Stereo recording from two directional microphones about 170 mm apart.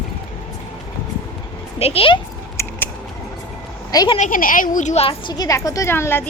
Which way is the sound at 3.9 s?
25° left (ahead or behind).